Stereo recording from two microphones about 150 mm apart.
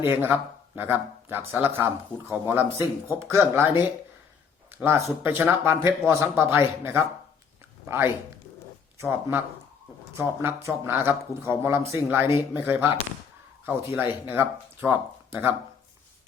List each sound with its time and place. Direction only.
0.0 s speech: 15° right (ahead or behind)